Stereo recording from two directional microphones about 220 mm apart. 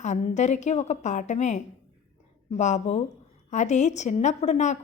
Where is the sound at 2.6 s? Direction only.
30° left (ahead or behind).